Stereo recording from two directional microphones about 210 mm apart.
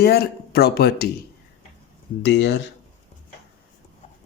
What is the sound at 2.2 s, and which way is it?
Speech, 55° left (ahead or behind).